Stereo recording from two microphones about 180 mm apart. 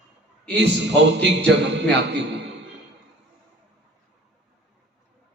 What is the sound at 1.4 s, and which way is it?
Speech, 75° right (ahead or behind).